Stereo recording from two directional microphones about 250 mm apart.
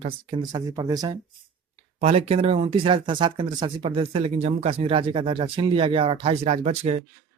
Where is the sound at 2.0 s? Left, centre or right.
Right.